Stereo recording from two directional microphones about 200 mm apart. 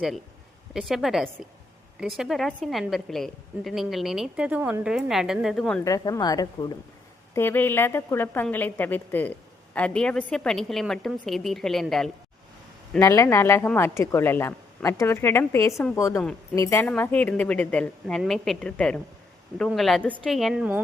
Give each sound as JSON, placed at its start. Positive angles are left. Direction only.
{"t": 0.7, "sound": "a woman's voice", "side_deg": 0}
{"t": 5.8, "sound": "a woman's voice", "side_deg": 20}
{"t": 13.0, "sound": "a woman's voice", "side_deg": 15}